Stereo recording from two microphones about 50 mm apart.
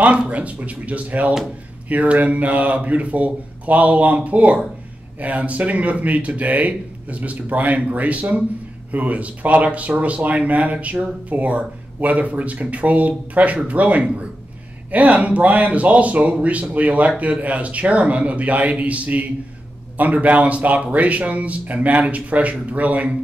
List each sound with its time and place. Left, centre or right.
0.3 s speech: right